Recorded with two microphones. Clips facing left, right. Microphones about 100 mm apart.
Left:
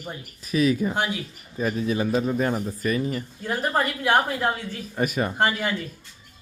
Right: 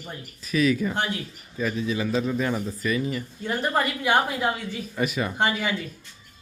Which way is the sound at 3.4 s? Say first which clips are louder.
Even; centre (ahead or behind).